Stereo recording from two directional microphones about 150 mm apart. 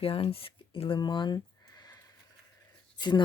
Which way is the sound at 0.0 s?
40° left (ahead or behind).